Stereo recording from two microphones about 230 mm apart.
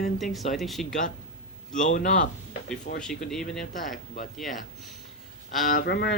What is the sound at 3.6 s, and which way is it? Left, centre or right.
Speech, left.